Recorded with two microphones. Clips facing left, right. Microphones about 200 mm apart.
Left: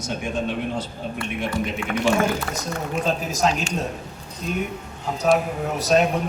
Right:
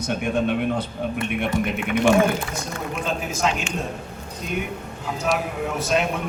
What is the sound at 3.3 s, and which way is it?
Speech, 40° left (ahead or behind).